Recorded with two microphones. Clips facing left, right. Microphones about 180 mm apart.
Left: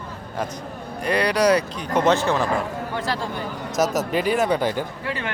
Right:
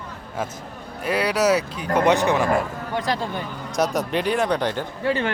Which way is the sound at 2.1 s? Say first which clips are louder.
Right 1 dB; 15° right (ahead or behind).